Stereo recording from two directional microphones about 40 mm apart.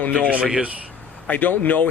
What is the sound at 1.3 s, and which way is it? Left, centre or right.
Speech, left.